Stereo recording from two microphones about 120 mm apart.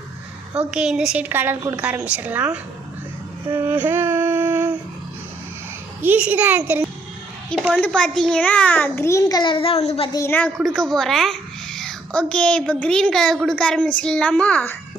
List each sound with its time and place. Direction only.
0.5 s a woman's voice: 10° right (ahead or behind)
3.5 s music: 15° right (ahead or behind)
6.0 s a woman's voice: 15° right (ahead or behind)
7.8 s a child's voice: 5° left (ahead or behind); by 10.1 s 60° left (ahead or behind)
10.1 s a child's voice: 25° left (ahead or behind)
10.6 s a child's voice: centre (ahead or behind)